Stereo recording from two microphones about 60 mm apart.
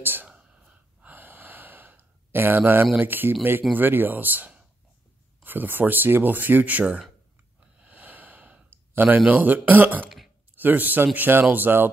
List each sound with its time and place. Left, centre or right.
0.0 s whispering: right
0.4 s whispering: centre
1.0 s sigh: right
3.0 s speech: right
7.8 s a sound: right
9.3 s speech: right
10.0 s a sound: centre
10.5 s speech: right